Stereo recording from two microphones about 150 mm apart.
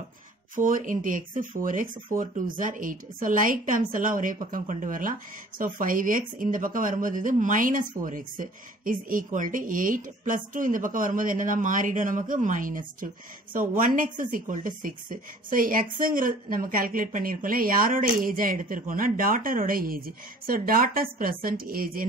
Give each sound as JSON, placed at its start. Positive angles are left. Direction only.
{"t": 0.6, "sound": "a woman's voice", "side_deg": -65}